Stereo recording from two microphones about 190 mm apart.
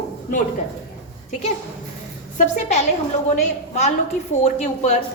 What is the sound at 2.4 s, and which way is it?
Speech, 35° left (ahead or behind).